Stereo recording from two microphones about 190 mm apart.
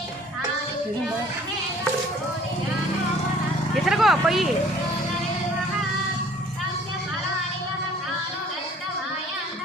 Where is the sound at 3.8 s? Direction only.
Centre (ahead or behind).